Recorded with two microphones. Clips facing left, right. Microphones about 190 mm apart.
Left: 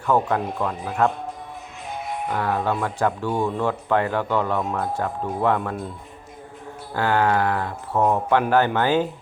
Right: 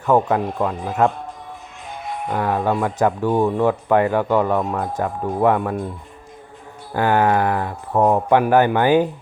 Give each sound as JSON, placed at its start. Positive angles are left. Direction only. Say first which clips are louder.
{"t": 0.0, "sound": "speech", "louder": "right 4 dB", "side_deg": -15}
{"t": 2.3, "sound": "speech", "louder": "right 4 dB", "side_deg": -15}
{"t": 6.9, "sound": "speech", "louder": "right 3 dB", "side_deg": -15}
{"t": 7.9, "sound": "speech", "louder": "right 4 dB", "side_deg": -35}
{"t": 8.3, "sound": "speech", "louder": "right 4 dB", "side_deg": -15}